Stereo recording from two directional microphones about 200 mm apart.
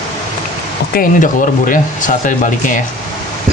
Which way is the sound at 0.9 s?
45° left (ahead or behind).